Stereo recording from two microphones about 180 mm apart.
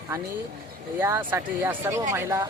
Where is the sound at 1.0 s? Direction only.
15° right (ahead or behind).